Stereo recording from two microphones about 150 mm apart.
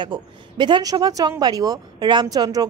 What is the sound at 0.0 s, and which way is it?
A woman's voice, 30° right (ahead or behind).